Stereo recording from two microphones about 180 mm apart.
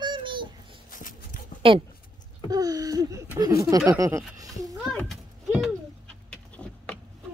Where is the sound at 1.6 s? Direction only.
30° right (ahead or behind).